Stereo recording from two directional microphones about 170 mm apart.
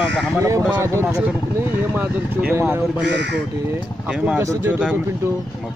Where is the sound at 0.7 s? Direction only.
15° right (ahead or behind).